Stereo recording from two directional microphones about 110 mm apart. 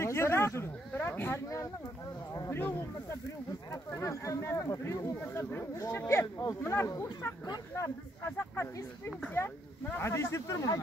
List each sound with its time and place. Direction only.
0.0 s speech: 25° left (ahead or behind)
2.3 s a sound: 30° left (ahead or behind)
3.7 s speech: 25° left (ahead or behind)